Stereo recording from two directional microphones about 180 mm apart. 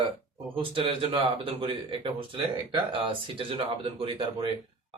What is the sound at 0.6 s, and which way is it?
A man's voice, 30° right (ahead or behind).